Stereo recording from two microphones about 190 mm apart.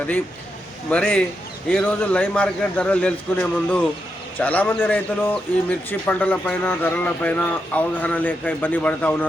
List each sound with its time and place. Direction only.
0.9 s a man's voice: 5° left (ahead or behind)